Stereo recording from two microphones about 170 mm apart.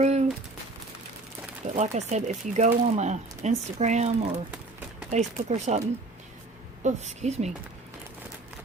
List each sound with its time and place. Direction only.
0.0 s a sound: 40° right (ahead or behind)
1.6 s speech: 40° right (ahead or behind)
5.1 s a woman's voice: 40° right (ahead or behind)
6.8 s a woman's voice: 40° right (ahead or behind)